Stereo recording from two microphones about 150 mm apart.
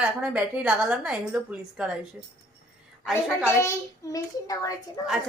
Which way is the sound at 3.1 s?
15° left (ahead or behind).